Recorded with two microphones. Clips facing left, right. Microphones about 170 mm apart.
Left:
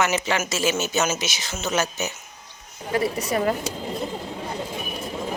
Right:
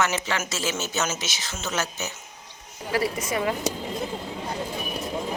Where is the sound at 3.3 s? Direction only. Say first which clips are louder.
Left 5 dB; 40° left (ahead or behind).